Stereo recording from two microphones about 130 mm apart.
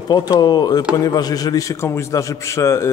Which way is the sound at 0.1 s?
30° left (ahead or behind).